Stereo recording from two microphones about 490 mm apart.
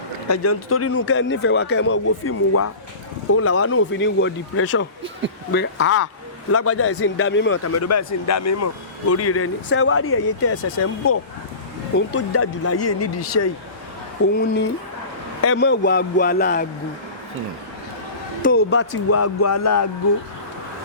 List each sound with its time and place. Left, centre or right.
0.3 s a man's voice: left
18.4 s a man's voice: left